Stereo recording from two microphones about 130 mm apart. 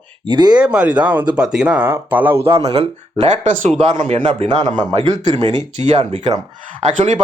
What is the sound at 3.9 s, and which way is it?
Speech, 45° right (ahead or behind).